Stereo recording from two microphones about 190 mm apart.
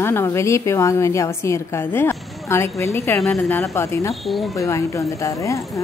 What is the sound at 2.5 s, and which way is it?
Speech, 15° left (ahead or behind).